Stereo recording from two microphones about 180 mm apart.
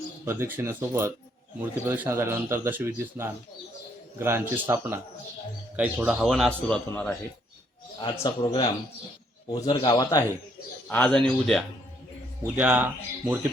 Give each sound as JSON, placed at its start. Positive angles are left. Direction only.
{"t": 0.3, "sound": "a man's voice", "side_deg": -10}
{"t": 8.0, "sound": "speech", "side_deg": 20}
{"t": 10.8, "sound": "speech", "side_deg": 10}
{"t": 12.5, "sound": "a man's voice", "side_deg": -5}